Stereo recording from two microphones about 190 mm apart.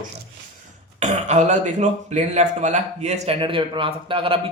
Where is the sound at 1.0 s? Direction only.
40° right (ahead or behind).